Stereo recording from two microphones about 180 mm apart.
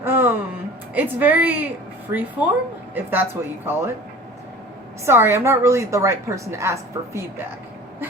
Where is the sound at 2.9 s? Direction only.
10° right (ahead or behind).